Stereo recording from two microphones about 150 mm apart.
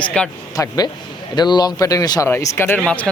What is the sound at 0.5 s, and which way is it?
Speech, 25° left (ahead or behind).